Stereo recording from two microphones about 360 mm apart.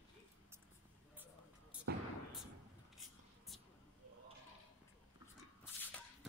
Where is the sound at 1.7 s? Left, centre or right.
Centre.